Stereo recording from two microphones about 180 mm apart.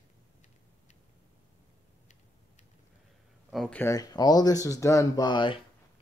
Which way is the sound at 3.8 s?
20° left (ahead or behind).